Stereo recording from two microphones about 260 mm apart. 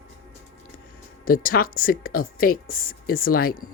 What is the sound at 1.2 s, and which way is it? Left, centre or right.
Speech, left.